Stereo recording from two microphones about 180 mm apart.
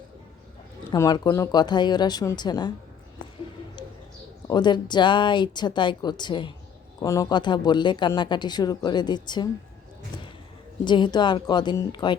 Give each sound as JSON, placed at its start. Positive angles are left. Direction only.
{"t": 0.9, "sound": "speech", "side_deg": 20}
{"t": 4.4, "sound": "speech", "side_deg": 25}
{"t": 10.8, "sound": "speech", "side_deg": 25}